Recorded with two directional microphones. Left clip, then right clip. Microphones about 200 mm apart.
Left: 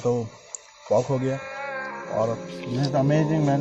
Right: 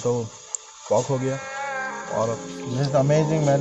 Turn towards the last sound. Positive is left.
turn(degrees=-50)  # may be behind; listen again after turning